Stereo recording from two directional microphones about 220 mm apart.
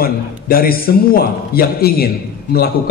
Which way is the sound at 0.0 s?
40° left (ahead or behind).